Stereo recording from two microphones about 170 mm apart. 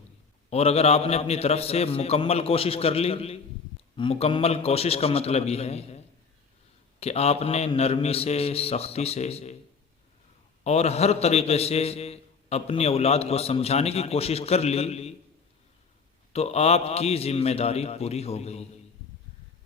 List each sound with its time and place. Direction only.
0.5 s a man's voice: 35° left (ahead or behind)
7.0 s a man's voice: 40° left (ahead or behind)
10.6 s a man's voice: 40° left (ahead or behind)
16.3 s a man's voice: 40° left (ahead or behind)